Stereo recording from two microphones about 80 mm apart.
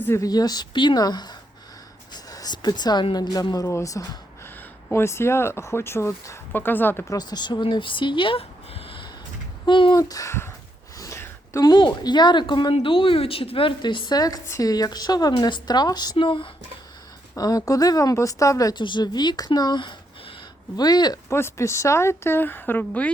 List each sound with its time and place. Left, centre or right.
0.3 s a woman's voice: left
3.7 s a woman's voice: left
4.9 s speech: left
7.1 s speech: left
9.6 s speech: left
10.0 s a woman's voice: left
10.9 s a sound: left
11.6 s a woman's voice: left
14.4 s speech: left
14.7 s a woman's voice: left
17.3 s a woman's voice: left
18.7 s speech: left
20.7 s a woman's voice: left
21.2 s speech: left